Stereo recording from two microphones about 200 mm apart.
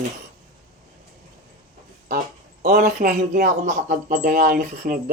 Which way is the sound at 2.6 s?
50° right (ahead or behind).